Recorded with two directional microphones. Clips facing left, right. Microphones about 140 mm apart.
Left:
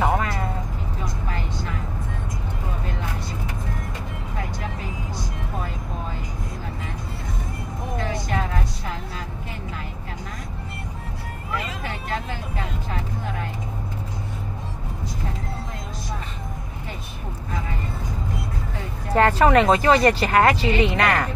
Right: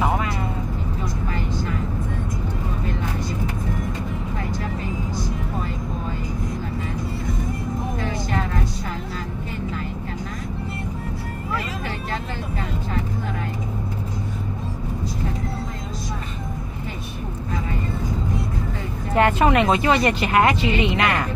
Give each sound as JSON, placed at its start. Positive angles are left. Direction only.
{"t": 19.1, "sound": "speech", "side_deg": 35}